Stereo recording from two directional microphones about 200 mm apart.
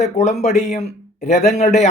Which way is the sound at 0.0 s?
35° left (ahead or behind).